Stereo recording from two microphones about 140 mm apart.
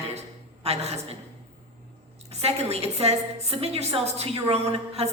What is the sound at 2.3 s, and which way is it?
A woman's voice, 50° right (ahead or behind).